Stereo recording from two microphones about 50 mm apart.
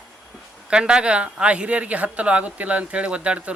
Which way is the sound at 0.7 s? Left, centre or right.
Centre.